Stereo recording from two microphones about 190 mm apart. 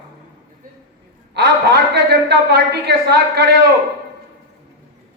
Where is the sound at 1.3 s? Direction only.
60° right (ahead or behind).